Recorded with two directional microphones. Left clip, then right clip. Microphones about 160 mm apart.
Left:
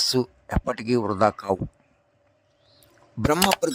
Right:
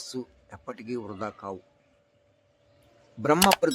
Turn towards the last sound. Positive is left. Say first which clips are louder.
# even
turn(degrees=0)  # may be behind; listen again after turning